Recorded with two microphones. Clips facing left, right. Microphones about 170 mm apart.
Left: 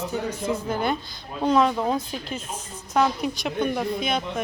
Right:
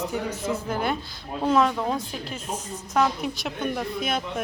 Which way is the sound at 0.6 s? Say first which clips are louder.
Left 1 dB; 5° right (ahead or behind).